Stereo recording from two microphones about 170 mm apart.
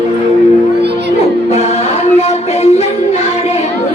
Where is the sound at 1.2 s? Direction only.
40° left (ahead or behind).